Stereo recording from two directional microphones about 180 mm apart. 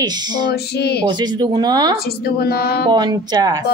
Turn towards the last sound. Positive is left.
turn(degrees=-20)  # may be behind; listen again after turning